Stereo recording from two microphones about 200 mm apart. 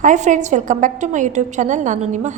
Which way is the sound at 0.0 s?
40° right (ahead or behind).